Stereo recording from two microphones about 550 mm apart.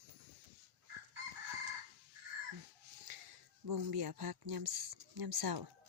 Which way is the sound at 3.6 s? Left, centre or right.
Right.